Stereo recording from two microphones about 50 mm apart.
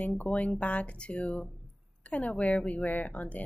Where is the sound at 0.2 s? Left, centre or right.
Left.